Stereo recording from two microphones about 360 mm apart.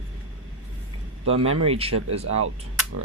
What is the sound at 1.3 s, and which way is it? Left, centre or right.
Speech, right.